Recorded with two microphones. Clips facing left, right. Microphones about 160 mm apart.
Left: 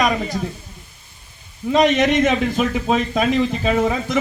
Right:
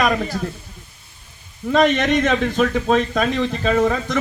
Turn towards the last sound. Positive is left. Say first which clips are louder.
# right 1 dB
turn(degrees=15)  # may be behind; listen again after turning